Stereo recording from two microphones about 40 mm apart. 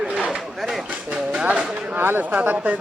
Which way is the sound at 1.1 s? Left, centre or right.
Right.